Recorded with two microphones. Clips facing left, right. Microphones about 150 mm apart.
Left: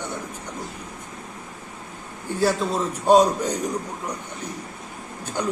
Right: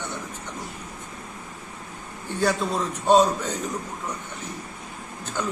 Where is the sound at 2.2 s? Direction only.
5° left (ahead or behind).